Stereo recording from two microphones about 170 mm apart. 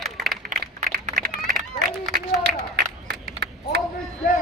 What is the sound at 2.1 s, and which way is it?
Run, 80° right.